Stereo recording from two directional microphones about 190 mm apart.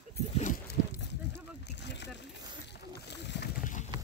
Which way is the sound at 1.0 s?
65° left (ahead or behind).